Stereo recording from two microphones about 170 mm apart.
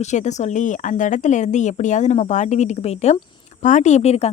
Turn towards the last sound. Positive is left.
turn(degrees=40)  # may be behind; listen again after turning